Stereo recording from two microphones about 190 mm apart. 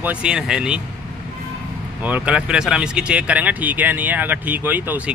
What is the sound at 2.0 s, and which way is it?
A man's voice, 5° right (ahead or behind).